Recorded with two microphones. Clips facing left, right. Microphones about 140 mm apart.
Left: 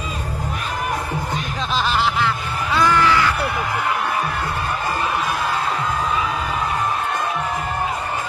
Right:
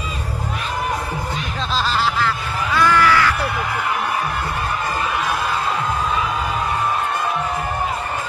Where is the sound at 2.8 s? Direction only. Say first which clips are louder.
Right 1 dB; 20° left (ahead or behind).